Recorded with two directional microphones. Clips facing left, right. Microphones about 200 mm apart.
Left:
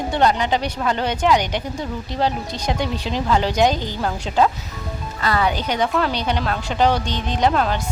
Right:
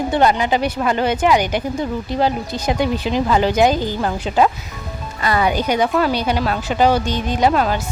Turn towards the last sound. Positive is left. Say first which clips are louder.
# right 3 dB
turn(degrees=-5)  # may be behind; listen again after turning